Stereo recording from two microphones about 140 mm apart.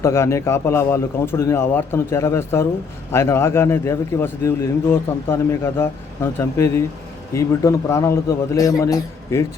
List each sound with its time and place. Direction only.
0.0 s a man's voice: 20° left (ahead or behind)